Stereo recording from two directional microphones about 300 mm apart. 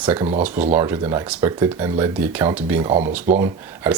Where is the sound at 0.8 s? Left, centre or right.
Centre.